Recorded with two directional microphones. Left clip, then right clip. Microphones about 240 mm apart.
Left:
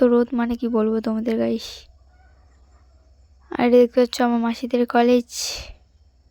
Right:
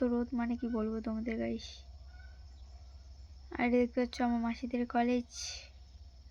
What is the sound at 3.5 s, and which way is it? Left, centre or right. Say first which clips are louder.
Speech: left 16 dB; left.